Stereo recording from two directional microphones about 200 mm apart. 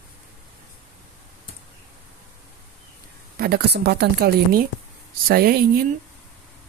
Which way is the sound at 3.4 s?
50° right (ahead or behind).